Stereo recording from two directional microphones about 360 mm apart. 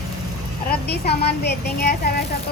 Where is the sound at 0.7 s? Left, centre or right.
Left.